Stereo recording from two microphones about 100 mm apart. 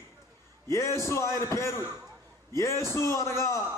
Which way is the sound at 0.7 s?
30° left (ahead or behind).